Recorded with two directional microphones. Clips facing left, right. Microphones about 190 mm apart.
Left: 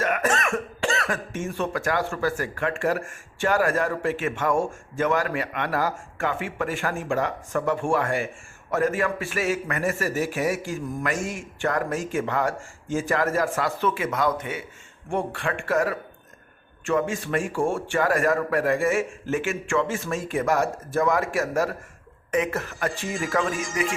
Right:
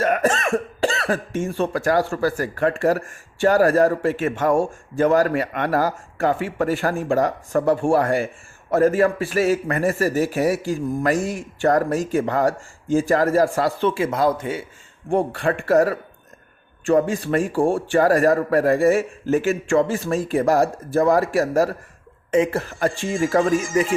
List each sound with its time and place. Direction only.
0.0 s speech: 35° right (ahead or behind)